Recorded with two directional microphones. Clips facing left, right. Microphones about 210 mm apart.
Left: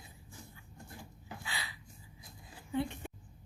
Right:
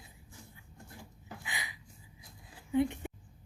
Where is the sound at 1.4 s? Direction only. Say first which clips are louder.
Even; 15° right (ahead or behind).